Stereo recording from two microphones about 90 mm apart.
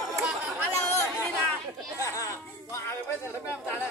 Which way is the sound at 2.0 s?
35° left (ahead or behind).